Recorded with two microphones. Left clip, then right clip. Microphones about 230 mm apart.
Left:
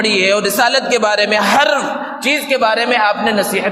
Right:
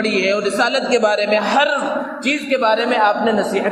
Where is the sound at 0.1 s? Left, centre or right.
Left.